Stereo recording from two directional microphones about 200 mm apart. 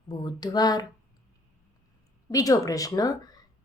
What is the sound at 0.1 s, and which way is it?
Speech, 20° left (ahead or behind).